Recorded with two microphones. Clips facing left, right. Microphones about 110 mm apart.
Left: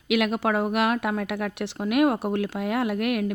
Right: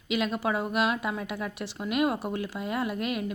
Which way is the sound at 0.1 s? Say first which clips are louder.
Left 5 dB; 70° left (ahead or behind).